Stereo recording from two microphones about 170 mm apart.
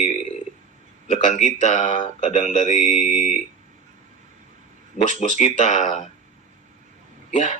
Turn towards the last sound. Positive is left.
turn(degrees=45)  # may be behind; listen again after turning